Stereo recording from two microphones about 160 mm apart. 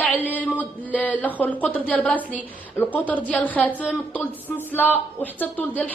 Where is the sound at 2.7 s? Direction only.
10° left (ahead or behind).